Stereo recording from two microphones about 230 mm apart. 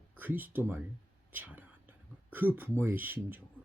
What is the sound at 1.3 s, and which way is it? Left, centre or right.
Whispering, centre.